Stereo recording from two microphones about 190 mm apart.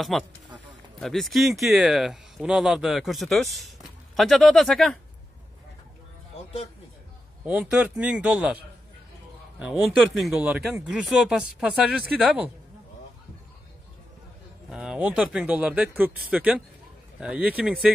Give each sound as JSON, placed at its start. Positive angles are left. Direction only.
{"t": 0.1, "sound": "speech", "side_deg": 0}
{"t": 6.3, "sound": "speech", "side_deg": 30}
{"t": 7.4, "sound": "speech", "side_deg": -5}
{"t": 9.6, "sound": "speech", "side_deg": -5}
{"t": 14.7, "sound": "speech", "side_deg": -5}